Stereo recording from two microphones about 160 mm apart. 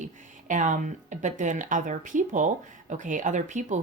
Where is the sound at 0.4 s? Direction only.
50° right (ahead or behind).